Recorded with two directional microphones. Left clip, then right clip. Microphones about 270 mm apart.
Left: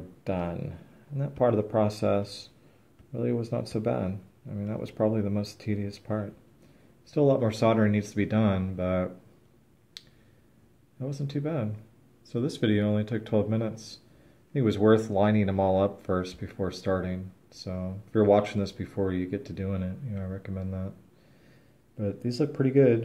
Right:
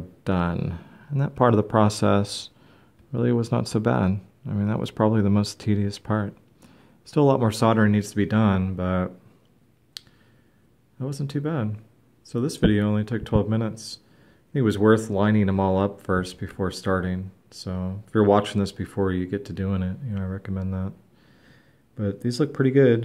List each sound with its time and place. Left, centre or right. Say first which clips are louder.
0.2 s speech: right 5 dB; right
1.1 s speech: right 5 dB; right
11.0 s speech: right 4 dB; right
21.9 s speech: right 4 dB; right